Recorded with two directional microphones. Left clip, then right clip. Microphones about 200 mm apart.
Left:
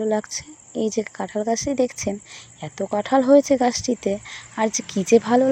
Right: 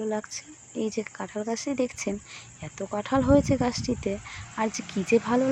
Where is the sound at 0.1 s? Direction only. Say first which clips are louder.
Left 8 dB; 20° left (ahead or behind).